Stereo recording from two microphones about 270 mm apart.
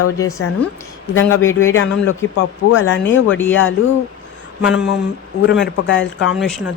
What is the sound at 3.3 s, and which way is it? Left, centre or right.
Speech, centre.